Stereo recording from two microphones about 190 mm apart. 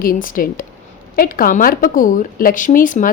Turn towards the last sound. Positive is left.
turn(degrees=45)  # may be behind; listen again after turning